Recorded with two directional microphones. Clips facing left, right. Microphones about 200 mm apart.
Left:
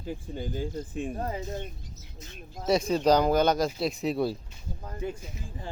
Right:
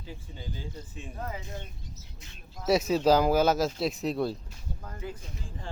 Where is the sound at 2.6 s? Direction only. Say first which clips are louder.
Even; 5° right (ahead or behind).